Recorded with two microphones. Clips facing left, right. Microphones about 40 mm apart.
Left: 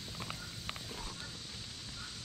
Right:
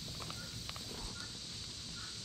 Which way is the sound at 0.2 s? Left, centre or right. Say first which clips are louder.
Left 2 dB; left.